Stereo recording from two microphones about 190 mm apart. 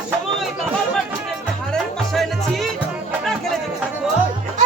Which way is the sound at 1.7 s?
Centre (ahead or behind).